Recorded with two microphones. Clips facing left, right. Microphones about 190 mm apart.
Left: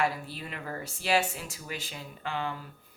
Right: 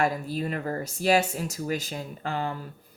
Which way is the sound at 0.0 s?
45° right (ahead or behind).